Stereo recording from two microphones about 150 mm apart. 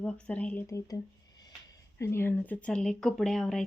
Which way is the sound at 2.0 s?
15° left (ahead or behind).